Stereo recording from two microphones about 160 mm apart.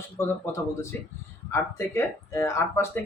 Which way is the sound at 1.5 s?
15° left (ahead or behind).